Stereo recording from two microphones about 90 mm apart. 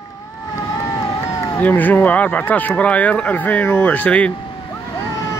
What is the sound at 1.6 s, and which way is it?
Speech, 20° left (ahead or behind).